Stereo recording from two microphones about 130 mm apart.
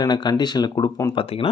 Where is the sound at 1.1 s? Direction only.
45° left (ahead or behind).